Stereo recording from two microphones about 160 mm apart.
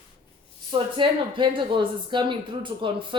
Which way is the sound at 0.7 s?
30° right (ahead or behind).